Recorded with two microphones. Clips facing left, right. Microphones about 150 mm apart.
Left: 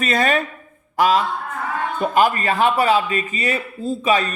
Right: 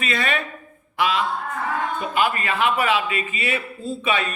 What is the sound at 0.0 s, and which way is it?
A man's voice, 40° left (ahead or behind).